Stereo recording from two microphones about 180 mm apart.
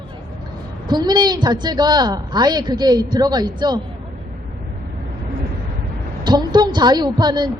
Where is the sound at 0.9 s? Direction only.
25° right (ahead or behind).